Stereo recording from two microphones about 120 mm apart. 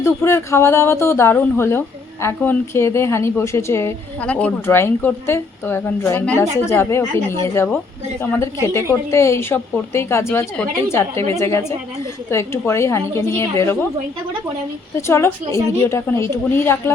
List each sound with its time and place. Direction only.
0.0 s a woman's voice: 20° left (ahead or behind)
4.2 s a woman's voice: 10° left (ahead or behind)
14.9 s a woman's voice: 25° left (ahead or behind)